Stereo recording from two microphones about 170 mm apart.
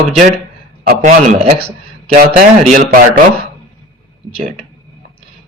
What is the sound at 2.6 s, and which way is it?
Speech, 45° right (ahead or behind).